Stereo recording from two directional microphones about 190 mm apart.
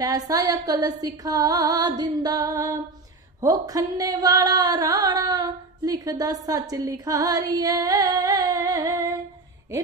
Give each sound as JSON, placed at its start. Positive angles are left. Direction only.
{"t": 0.3, "sound": "speech", "side_deg": -20}
{"t": 6.7, "sound": "music", "side_deg": -15}